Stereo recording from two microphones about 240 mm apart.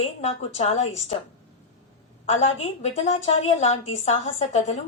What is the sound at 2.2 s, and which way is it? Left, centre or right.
A woman's voice, left.